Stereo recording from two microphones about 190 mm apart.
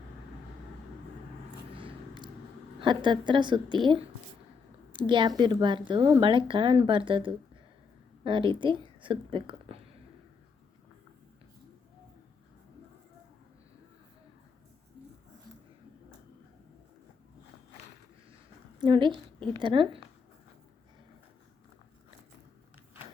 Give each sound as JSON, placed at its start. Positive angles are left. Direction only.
{"t": 1.7, "sound": "a sound", "side_deg": -25}
{"t": 2.8, "sound": "speech", "side_deg": -25}
{"t": 18.8, "sound": "speech", "side_deg": -25}